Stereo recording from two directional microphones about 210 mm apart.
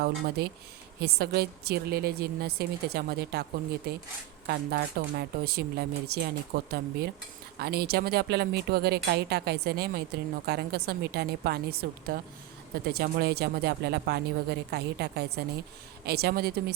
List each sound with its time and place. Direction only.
0.0 s a woman's voice: 50° right (ahead or behind)